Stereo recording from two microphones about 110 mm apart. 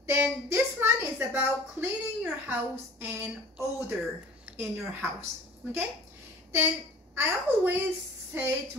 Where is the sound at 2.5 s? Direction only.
20° right (ahead or behind).